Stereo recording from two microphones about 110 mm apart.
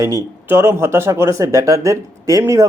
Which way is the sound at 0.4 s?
20° right (ahead or behind).